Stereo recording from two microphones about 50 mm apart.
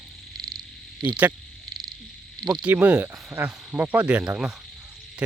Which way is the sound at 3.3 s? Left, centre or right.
Right.